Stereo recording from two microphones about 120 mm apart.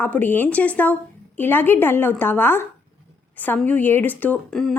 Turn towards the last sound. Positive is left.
turn(degrees=5)  # may be behind; listen again after turning